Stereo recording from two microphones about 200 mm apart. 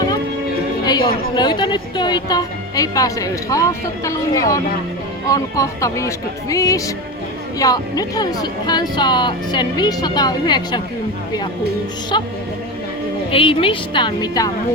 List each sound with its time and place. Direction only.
0.9 s a woman's voice: 20° left (ahead or behind)
12.1 s a woman's voice: 25° left (ahead or behind)
13.3 s a woman's voice: 25° left (ahead or behind)